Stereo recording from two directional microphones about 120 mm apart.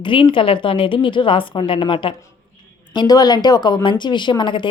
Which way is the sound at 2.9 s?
35° left (ahead or behind).